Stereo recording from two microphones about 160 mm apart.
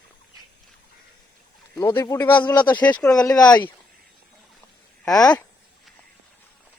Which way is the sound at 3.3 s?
25° left (ahead or behind).